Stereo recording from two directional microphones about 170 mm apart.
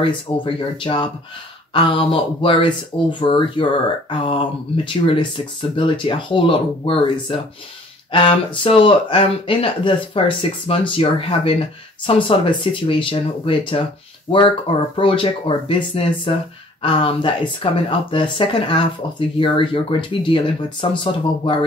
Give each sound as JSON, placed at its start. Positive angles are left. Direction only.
{"t": 0.6, "sound": "speech", "side_deg": 30}
{"t": 14.3, "sound": "speech", "side_deg": 40}
{"t": 15.0, "sound": "speech", "side_deg": 30}